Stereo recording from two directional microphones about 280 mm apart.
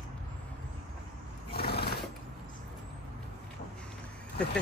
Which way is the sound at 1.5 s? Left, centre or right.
Left.